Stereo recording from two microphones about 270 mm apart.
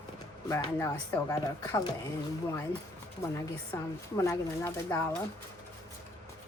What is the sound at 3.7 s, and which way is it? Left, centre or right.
Speech, centre.